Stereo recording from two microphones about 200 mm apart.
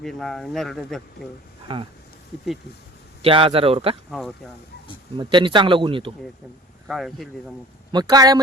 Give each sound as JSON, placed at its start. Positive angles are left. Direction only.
{"t": 0.0, "sound": "speech", "side_deg": 0}
{"t": 1.6, "sound": "speech", "side_deg": -25}
{"t": 3.2, "sound": "speech", "side_deg": -25}
{"t": 4.1, "sound": "speech", "side_deg": 0}
{"t": 5.1, "sound": "speech", "side_deg": -25}
{"t": 6.8, "sound": "speech", "side_deg": 0}
{"t": 7.9, "sound": "speech", "side_deg": -20}